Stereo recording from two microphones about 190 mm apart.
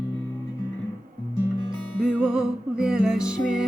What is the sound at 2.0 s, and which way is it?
Music, 5° right (ahead or behind).